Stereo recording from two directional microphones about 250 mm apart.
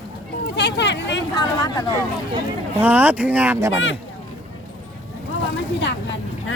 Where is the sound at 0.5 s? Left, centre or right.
Left.